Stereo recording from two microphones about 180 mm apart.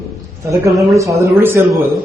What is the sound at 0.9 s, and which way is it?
Speech, 15° right (ahead or behind).